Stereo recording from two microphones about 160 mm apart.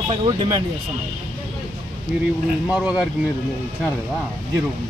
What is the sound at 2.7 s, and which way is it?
Speech, 5° right (ahead or behind).